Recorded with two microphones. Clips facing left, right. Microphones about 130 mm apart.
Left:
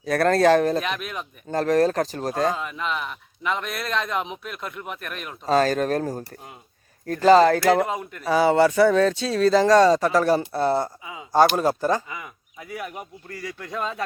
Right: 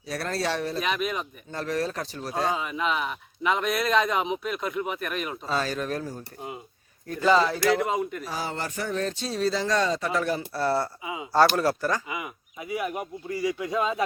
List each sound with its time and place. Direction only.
0.0 s speech: 55° left (ahead or behind)
0.8 s a man's voice: centre (ahead or behind)
1.5 s speech: 45° left (ahead or behind)
2.6 s a man's voice: centre (ahead or behind)
5.5 s speech: 45° left (ahead or behind)
7.3 s speech: 45° left (ahead or behind)
7.9 s a man's voice: centre (ahead or behind)
8.2 s speech: 75° left (ahead or behind); by 8.9 s 90° left
9.3 s speech: 50° left (ahead or behind)
10.5 s speech: 20° left (ahead or behind)
11.0 s speech: 15° right (ahead or behind)
11.3 s speech: 15° left (ahead or behind)
12.0 s speech: 15° right (ahead or behind)